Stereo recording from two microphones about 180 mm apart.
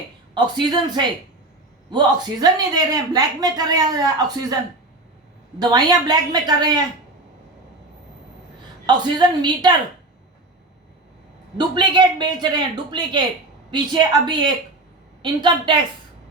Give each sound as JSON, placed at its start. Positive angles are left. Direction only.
{"t": 0.3, "sound": "speech", "side_deg": -25}
{"t": 5.5, "sound": "speech", "side_deg": -25}
{"t": 8.9, "sound": "speech", "side_deg": -25}
{"t": 11.5, "sound": "speech", "side_deg": -25}